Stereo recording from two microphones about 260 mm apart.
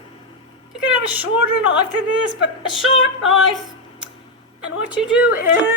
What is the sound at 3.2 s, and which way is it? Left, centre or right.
Speech, centre.